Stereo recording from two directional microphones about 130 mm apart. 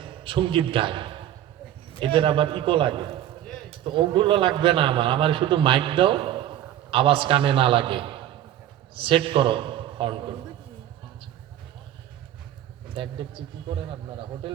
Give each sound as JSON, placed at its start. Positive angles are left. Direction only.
{"t": 0.0, "sound": "a man's voice", "side_deg": -45}
{"t": 12.9, "sound": "a man's voice", "side_deg": -40}